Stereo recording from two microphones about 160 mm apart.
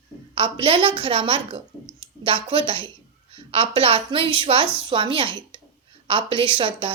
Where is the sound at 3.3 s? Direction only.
35° right (ahead or behind).